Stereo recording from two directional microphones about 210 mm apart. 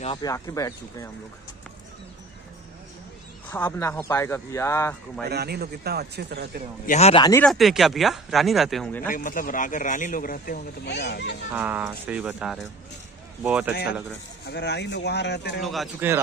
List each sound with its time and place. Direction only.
0.0 s speech: 20° left (ahead or behind)
3.4 s speech: 10° left (ahead or behind)
5.3 s speech: 50° right (ahead or behind)
6.9 s speech: 30° left (ahead or behind)
7.4 s speech: centre (ahead or behind)
9.1 s speech: 40° left (ahead or behind)
11.5 s speech: 10° right (ahead or behind)
14.4 s speech: 55° left (ahead or behind)
15.6 s speech: centre (ahead or behind)